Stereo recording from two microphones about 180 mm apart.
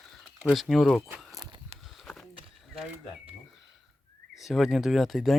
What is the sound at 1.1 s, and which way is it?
Walk, centre (ahead or behind).